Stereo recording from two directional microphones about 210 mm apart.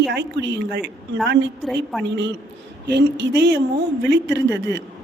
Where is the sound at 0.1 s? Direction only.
55° right (ahead or behind).